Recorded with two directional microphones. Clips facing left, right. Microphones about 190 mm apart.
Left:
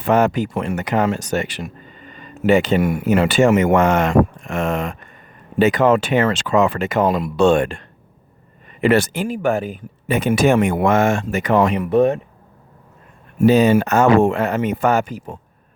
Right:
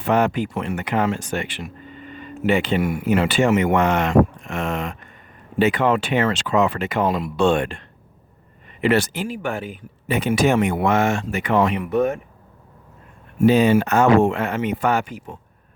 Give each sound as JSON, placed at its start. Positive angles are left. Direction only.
{"t": 0.0, "sound": "speech", "side_deg": 45}
{"t": 13.4, "sound": "speech", "side_deg": 40}